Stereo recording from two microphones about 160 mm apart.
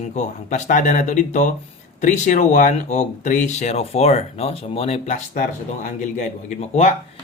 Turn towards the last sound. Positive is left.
turn(degrees=45)  # may be behind; listen again after turning